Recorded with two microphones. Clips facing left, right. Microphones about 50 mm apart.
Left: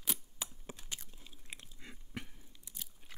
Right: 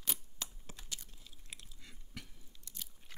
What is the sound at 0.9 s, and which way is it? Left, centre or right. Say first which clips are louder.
Chewing: left 1 dB; left.